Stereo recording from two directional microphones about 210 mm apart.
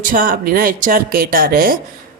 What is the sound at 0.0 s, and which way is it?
A woman's voice, 40° right (ahead or behind).